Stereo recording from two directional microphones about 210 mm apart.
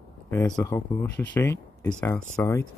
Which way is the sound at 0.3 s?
10° left (ahead or behind).